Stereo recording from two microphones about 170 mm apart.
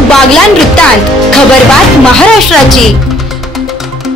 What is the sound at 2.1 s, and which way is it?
Speech, 5° left (ahead or behind).